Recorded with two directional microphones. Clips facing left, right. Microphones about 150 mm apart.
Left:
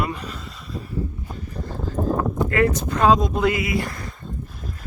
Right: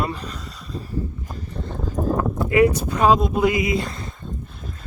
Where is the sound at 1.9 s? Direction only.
10° right (ahead or behind).